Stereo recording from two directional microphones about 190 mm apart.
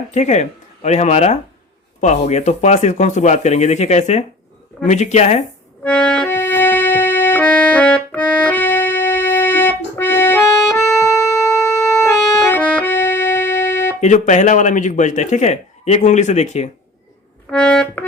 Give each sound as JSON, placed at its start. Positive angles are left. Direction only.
{"t": 0.1, "sound": "speech", "side_deg": 35}
{"t": 5.8, "sound": "music", "side_deg": 5}
{"t": 14.0, "sound": "speech", "side_deg": 40}
{"t": 17.4, "sound": "accordion", "side_deg": 5}